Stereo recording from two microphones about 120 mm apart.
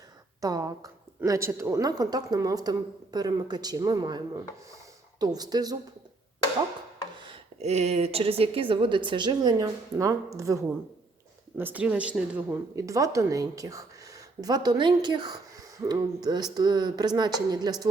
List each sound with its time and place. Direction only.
0.4 s a woman's voice: 35° right (ahead or behind)
5.2 s a woman's voice: 35° right (ahead or behind)
7.6 s a woman's voice: 65° right (ahead or behind); by 10.6 s 25° right (ahead or behind)
11.5 s speech: 15° right (ahead or behind)
12.7 s a woman's voice: 30° right (ahead or behind)